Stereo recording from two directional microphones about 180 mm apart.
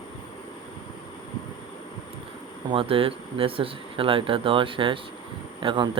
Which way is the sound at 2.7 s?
30° right (ahead or behind).